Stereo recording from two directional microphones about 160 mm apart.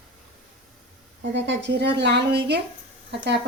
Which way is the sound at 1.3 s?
90° right.